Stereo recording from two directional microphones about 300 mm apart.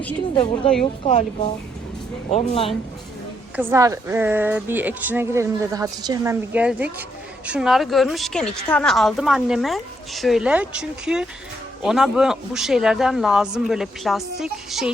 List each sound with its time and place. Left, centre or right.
1.0 s speech: centre
3.5 s a woman's voice: centre